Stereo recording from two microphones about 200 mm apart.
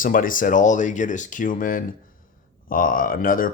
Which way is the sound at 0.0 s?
45° left (ahead or behind).